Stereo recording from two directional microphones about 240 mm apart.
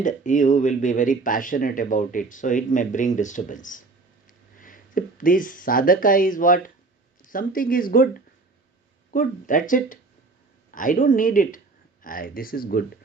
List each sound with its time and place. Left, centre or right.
0.0 s speech: left
9.1 s speech: left